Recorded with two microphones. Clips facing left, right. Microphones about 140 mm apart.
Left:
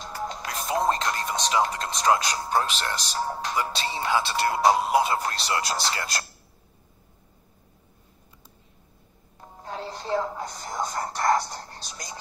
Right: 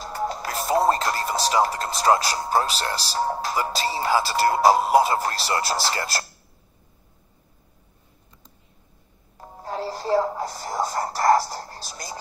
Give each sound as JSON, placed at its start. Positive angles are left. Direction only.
{"t": 0.0, "sound": "music", "side_deg": -40}
{"t": 1.5, "sound": "speech", "side_deg": -40}
{"t": 9.4, "sound": "music", "side_deg": -40}